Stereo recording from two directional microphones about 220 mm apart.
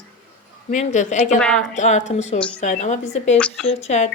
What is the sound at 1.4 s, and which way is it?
Speech, 5° left (ahead or behind).